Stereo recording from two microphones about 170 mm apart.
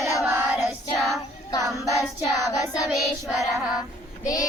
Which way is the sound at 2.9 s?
Centre (ahead or behind).